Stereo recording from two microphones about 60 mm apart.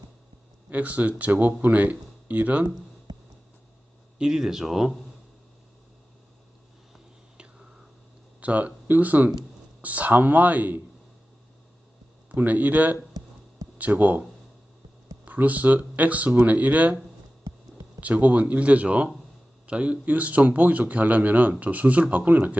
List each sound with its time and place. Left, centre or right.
0.7 s speech: right
3.1 s a sound: right
4.2 s speech: centre
8.4 s speech: right
12.3 s speech: right
15.2 s speech: right
18.0 s speech: right